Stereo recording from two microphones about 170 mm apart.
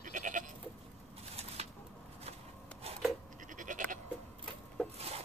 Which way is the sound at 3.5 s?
50° right (ahead or behind).